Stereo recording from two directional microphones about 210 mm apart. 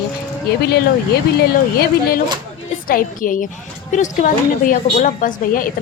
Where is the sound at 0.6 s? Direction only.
50° left (ahead or behind).